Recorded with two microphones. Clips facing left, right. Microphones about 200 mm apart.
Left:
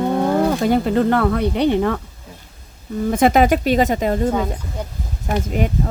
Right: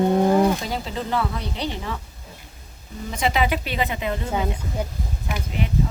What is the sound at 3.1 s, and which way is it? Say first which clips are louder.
Speech: left 8 dB; 50° left (ahead or behind).